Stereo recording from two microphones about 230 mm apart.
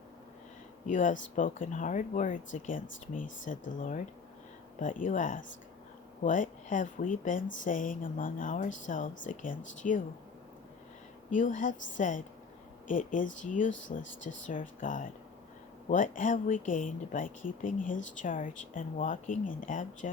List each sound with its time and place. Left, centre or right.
0.9 s speech: left
11.3 s speech: left